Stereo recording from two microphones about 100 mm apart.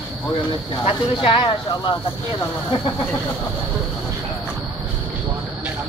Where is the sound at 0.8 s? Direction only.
60° left (ahead or behind).